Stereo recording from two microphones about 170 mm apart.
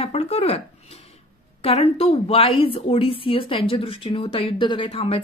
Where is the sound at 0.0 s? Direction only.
40° left (ahead or behind).